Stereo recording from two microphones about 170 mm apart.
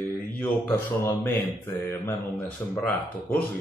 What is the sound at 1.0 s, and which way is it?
Speech, 15° left (ahead or behind).